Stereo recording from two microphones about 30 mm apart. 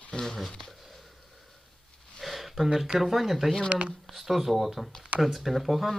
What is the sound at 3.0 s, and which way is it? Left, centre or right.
Speech, centre.